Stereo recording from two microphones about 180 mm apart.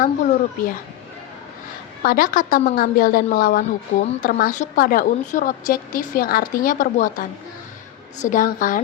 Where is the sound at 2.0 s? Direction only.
50° left (ahead or behind).